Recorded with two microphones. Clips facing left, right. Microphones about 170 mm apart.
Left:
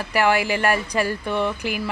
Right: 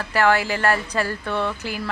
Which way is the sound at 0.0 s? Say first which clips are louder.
Even; 15° left (ahead or behind).